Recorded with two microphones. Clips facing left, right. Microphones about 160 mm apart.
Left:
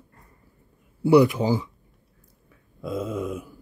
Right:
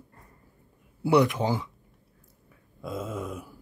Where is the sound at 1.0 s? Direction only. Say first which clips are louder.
Left 5 dB; 5° left (ahead or behind).